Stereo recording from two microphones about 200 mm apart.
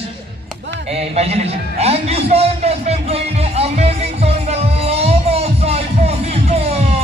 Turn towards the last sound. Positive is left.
turn(degrees=-30)  # may be behind; listen again after turning